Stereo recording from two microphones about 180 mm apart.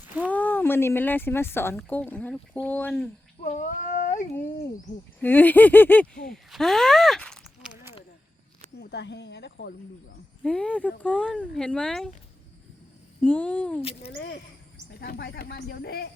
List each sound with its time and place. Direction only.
0.3 s speech: 10° left (ahead or behind)
3.4 s speech: 45° left (ahead or behind)
5.2 s speech: 10° left (ahead or behind)
8.8 s speech: 70° left (ahead or behind)
10.4 s speech: 5° left (ahead or behind)
13.2 s speech: 10° left (ahead or behind)
14.2 s speech: 70° left (ahead or behind)